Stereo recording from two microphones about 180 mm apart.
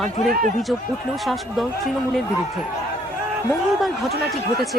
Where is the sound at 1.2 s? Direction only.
Centre (ahead or behind).